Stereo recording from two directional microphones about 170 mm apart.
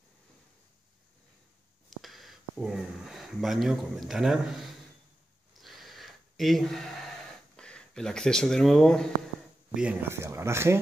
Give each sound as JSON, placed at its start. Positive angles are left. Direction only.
{"t": 1.9, "sound": "speech", "side_deg": 0}
{"t": 5.6, "sound": "a sound", "side_deg": 0}
{"t": 9.8, "sound": "speech", "side_deg": -10}